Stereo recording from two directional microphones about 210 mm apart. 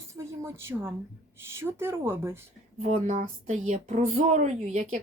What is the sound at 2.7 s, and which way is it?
Speech, 35° right (ahead or behind).